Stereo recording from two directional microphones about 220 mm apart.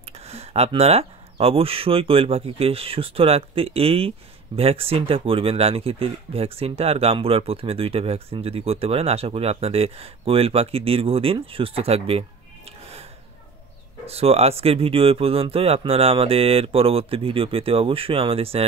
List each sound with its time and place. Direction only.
0.0 s speech: 30° right (ahead or behind)
14.0 s speech: 25° right (ahead or behind)